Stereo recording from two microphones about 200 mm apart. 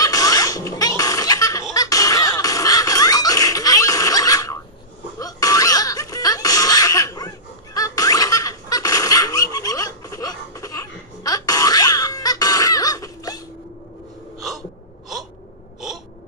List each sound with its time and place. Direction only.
0.0 s baby laughter: 15° left (ahead or behind)
5.2 s music: 15° left (ahead or behind)